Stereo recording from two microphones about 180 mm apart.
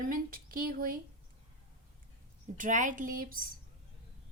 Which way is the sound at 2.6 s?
45° right (ahead or behind).